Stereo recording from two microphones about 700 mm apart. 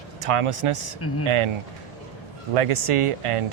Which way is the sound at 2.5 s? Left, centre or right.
Right.